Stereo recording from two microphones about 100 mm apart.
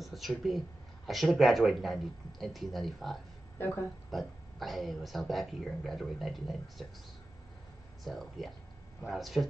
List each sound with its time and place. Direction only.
0.0 s a woman's voice: centre (ahead or behind)
3.5 s speech: 20° left (ahead or behind)
4.1 s a woman's voice: centre (ahead or behind)
8.0 s a woman's voice: centre (ahead or behind)